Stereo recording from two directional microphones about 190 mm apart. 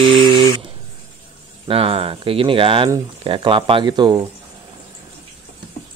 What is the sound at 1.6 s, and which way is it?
Speech, 30° right (ahead or behind).